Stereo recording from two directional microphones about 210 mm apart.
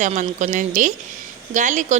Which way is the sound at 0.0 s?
35° right (ahead or behind).